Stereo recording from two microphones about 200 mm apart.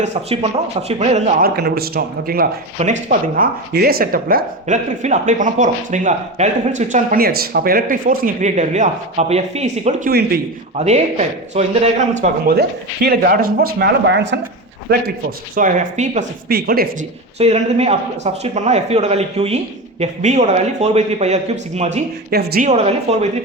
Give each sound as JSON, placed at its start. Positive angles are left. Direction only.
{"t": 0.0, "sound": "speech", "side_deg": -35}
{"t": 1.5, "sound": "speech", "side_deg": -50}
{"t": 2.7, "sound": "speech", "side_deg": -35}
{"t": 10.1, "sound": "speech", "side_deg": -50}
{"t": 10.8, "sound": "speech", "side_deg": -35}
{"t": 12.5, "sound": "speech", "side_deg": -50}
{"t": 15.5, "sound": "speech", "side_deg": -40}
{"t": 16.5, "sound": "speech", "side_deg": -50}
{"t": 17.3, "sound": "speech", "side_deg": -30}
{"t": 22.3, "sound": "speech", "side_deg": -50}
{"t": 22.6, "sound": "speech", "side_deg": -35}